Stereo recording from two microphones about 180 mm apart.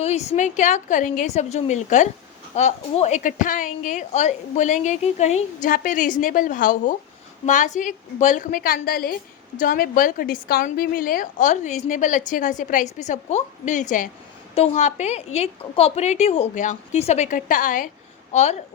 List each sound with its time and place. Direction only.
0.0 s a woman's voice: 35° left (ahead or behind)